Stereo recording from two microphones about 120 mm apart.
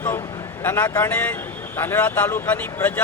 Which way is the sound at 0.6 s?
20° left (ahead or behind).